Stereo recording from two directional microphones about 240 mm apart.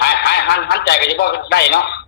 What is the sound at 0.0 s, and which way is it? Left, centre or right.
A man's voice, left.